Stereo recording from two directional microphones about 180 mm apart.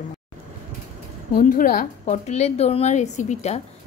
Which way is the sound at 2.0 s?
40° left (ahead or behind).